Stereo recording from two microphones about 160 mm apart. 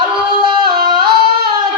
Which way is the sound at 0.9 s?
30° right (ahead or behind).